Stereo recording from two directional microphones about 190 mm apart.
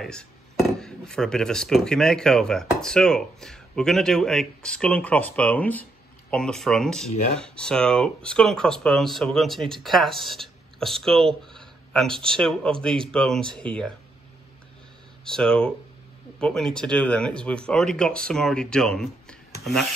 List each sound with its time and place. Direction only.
0.0 s speech: 5° left (ahead or behind)
15.2 s speech: 5° left (ahead or behind)